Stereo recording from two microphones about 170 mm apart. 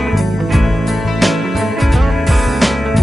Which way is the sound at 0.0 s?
Centre (ahead or behind).